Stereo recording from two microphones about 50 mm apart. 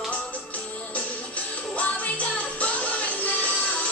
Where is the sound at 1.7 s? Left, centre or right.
Left.